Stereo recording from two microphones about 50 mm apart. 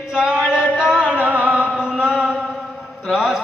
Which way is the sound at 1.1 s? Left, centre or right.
Right.